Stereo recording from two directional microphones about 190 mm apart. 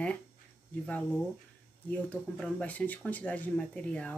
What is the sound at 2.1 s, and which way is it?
Speech, 5° left (ahead or behind).